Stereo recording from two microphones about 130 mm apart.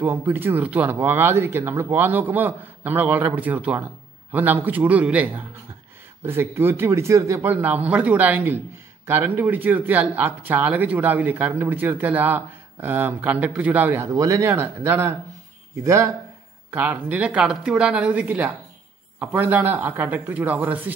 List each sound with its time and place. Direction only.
0.0 s speech: 15° right (ahead or behind)
16.7 s speech: 10° right (ahead or behind)